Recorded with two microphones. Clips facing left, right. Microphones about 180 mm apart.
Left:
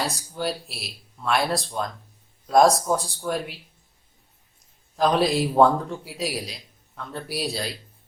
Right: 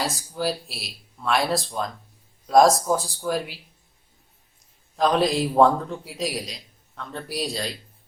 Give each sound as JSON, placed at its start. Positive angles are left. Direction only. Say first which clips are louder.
{"t": 0.0, "sound": "a man's voice", "louder": "right 1 dB", "side_deg": 0}
{"t": 4.9, "sound": "a man's voice", "louder": "even", "side_deg": 0}